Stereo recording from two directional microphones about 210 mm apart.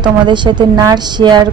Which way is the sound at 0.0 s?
20° right (ahead or behind).